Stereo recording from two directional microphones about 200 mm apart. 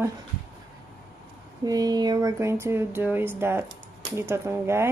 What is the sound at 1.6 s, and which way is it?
Speech, 20° right (ahead or behind).